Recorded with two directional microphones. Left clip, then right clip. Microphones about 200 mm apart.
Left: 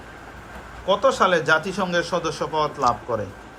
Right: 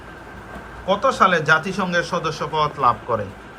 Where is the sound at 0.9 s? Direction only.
5° left (ahead or behind).